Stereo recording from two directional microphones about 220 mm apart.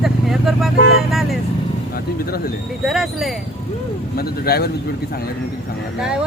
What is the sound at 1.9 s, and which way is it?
Speech, 45° left (ahead or behind).